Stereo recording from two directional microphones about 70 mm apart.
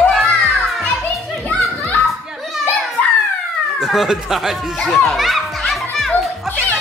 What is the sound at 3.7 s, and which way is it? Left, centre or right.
Speech, centre.